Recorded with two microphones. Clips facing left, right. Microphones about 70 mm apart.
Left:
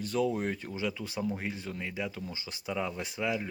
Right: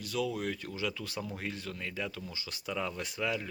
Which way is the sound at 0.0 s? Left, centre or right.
Left.